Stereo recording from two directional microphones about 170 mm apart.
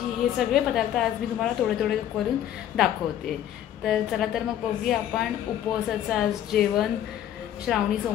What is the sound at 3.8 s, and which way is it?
Speech, centre (ahead or behind).